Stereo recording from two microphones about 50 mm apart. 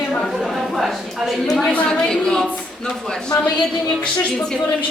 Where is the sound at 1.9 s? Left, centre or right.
Centre.